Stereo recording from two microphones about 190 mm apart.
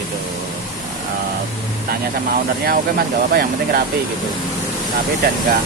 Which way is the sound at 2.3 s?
50° right (ahead or behind).